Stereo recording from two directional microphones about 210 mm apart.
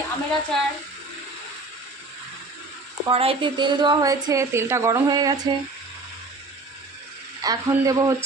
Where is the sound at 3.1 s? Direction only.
30° right (ahead or behind).